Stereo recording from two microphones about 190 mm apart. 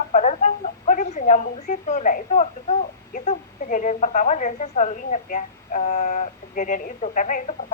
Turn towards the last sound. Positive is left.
turn(degrees=40)  # may be behind; listen again after turning